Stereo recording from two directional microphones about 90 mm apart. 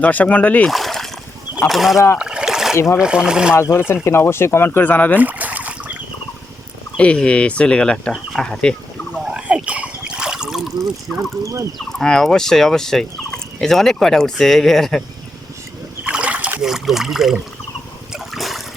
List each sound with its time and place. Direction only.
0.0 s speech: 15° left (ahead or behind)
0.7 s splash: centre (ahead or behind)
1.5 s turkey: centre (ahead or behind)
2.1 s splash: 10° right (ahead or behind)
2.7 s speech: 30° left (ahead or behind)
3.0 s speech: 10° right (ahead or behind)
3.5 s speech: 30° left (ahead or behind)
5.2 s boat: 15° right (ahead or behind)
6.9 s speech: 10° left (ahead or behind)
9.1 s a sound: 10° right (ahead or behind)
11.9 s turkey: 5° left (ahead or behind)
16.0 s boat: 15° right (ahead or behind)
16.6 s speech: 5° right (ahead or behind)
18.1 s a sound: centre (ahead or behind)